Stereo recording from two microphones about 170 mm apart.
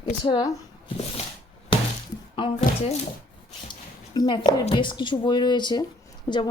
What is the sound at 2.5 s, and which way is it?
Speech, 45° left (ahead or behind).